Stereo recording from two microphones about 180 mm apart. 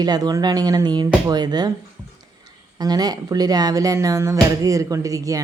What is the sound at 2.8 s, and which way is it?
Speech, 20° right (ahead or behind).